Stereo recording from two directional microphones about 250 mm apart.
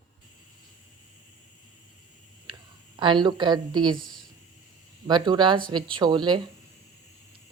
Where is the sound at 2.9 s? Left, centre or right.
Centre.